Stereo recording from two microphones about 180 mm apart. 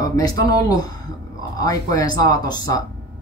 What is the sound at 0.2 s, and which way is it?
Speech, 20° left (ahead or behind).